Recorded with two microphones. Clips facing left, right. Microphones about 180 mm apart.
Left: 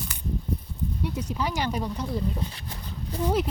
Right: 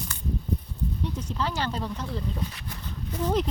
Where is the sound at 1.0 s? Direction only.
10° left (ahead or behind).